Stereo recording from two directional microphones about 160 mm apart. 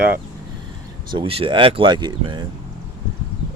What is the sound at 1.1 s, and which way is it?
Speech, 35° right (ahead or behind).